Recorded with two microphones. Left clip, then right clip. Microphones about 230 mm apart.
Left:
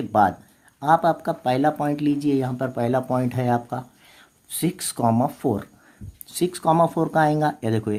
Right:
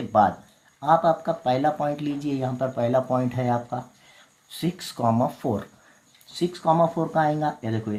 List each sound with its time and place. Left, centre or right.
0.1 s speech: left